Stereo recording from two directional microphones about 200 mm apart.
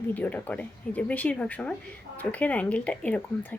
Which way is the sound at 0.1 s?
10° left (ahead or behind).